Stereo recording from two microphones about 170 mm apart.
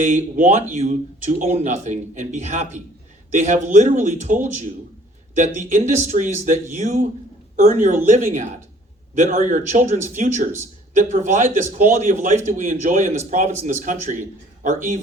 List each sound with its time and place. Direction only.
0.0 s speech: 45° right (ahead or behind)
5.4 s speech: 45° right (ahead or behind)